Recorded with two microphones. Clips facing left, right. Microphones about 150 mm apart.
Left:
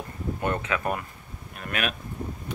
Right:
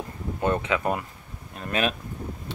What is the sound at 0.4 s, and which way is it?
Speech, 20° right (ahead or behind).